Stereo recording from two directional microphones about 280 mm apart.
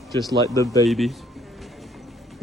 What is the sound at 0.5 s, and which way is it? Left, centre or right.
Speech, centre.